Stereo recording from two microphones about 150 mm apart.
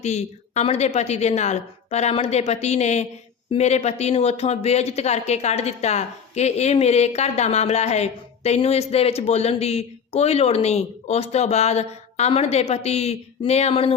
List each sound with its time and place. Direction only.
0.0 s speech: 50° left (ahead or behind)